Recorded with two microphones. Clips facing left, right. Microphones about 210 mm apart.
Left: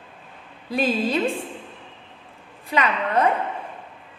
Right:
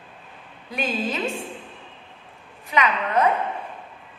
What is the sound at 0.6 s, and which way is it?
Speech, 30° left (ahead or behind).